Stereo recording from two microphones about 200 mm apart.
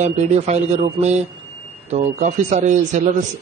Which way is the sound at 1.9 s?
35° right (ahead or behind).